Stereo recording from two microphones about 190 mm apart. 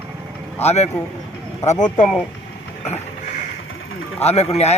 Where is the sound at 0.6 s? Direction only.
35° left (ahead or behind).